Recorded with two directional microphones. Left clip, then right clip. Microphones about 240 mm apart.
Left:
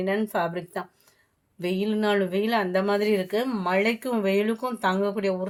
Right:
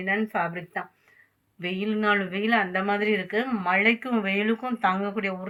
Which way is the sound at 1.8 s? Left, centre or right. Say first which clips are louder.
Even; left.